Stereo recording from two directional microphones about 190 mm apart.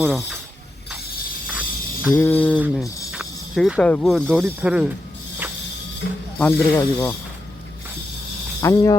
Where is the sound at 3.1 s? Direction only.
5° right (ahead or behind).